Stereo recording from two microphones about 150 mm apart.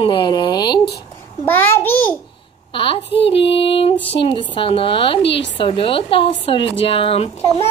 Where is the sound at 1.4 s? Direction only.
15° left (ahead or behind).